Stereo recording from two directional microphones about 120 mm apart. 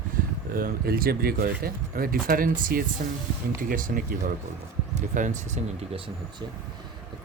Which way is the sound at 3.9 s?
90° right.